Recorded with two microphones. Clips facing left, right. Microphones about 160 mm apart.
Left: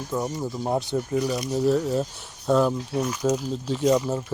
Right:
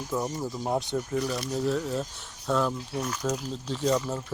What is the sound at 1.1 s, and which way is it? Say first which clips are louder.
Speech: left 5 dB; 15° left (ahead or behind).